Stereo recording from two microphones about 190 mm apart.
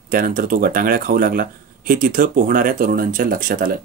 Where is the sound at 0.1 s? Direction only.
50° right (ahead or behind).